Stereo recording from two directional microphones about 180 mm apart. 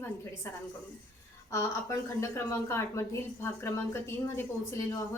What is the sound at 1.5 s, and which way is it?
A woman's voice, 15° left (ahead or behind).